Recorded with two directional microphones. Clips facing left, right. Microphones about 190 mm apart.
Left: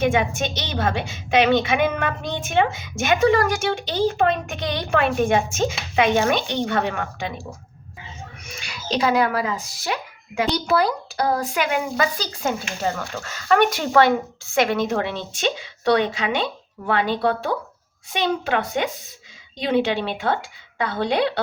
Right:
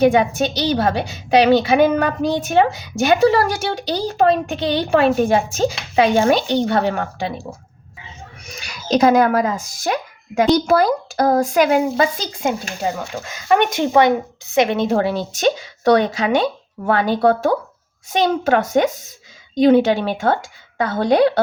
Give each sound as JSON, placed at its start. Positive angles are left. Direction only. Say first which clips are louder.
{"t": 0.0, "sound": "a woman's voice", "louder": "right 6 dB", "side_deg": -35}
{"t": 8.6, "sound": "speech", "louder": "right 7 dB", "side_deg": -40}
{"t": 12.1, "sound": "a woman's voice", "louder": "right 3 dB", "side_deg": -20}